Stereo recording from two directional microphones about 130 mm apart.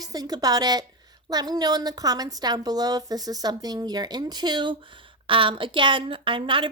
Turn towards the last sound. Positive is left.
turn(degrees=-40)  # may be behind; listen again after turning